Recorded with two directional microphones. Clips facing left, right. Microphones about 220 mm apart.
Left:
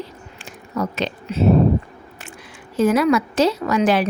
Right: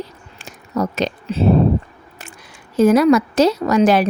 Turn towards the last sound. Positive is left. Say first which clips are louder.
# right 4 dB
turn(degrees=-40)  # may be behind; listen again after turning